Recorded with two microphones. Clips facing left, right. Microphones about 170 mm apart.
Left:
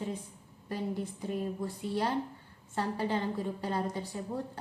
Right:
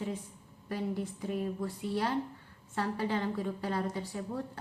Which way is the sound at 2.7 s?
30° left (ahead or behind).